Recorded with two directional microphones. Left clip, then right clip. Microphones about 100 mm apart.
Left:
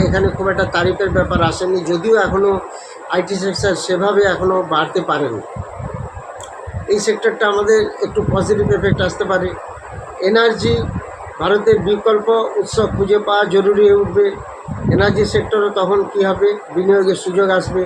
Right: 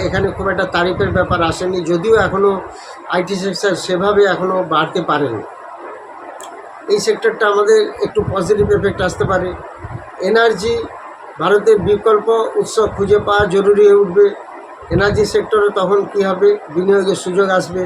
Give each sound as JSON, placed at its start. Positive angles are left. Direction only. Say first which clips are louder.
{"t": 0.1, "sound": "speech", "louder": "left 1 dB", "side_deg": -10}
{"t": 6.8, "sound": "a man's voice", "louder": "right 1 dB", "side_deg": -10}